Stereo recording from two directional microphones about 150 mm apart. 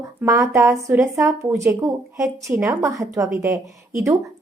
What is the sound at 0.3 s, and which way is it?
A woman's voice, 20° right (ahead or behind).